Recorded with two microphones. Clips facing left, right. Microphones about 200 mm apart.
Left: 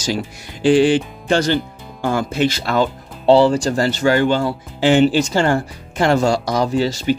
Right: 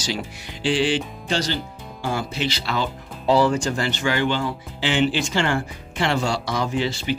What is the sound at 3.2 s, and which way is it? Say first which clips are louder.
Speech: left 6 dB; 30° left (ahead or behind).